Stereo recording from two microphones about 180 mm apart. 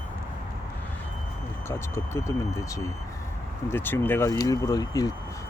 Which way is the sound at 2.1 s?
15° left (ahead or behind).